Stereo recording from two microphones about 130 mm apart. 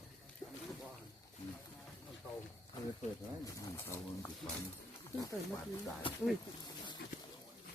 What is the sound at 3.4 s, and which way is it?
Speech, 25° left (ahead or behind).